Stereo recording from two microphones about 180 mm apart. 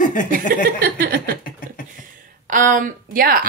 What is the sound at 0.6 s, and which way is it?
Speech, 55° right (ahead or behind).